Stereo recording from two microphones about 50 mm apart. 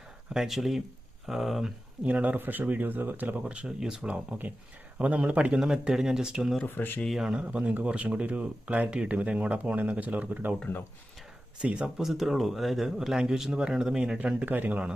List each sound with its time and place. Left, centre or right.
0.3 s speech: centre
2.0 s speech: right
3.8 s speech: centre
4.1 s speech: right
5.5 s speech: centre
6.7 s speech: left
7.3 s speech: right
11.6 s speech: right
11.9 s speech: centre
14.4 s speech: right